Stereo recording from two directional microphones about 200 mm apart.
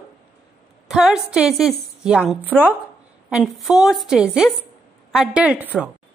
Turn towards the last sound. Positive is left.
turn(degrees=-5)  # may be behind; listen again after turning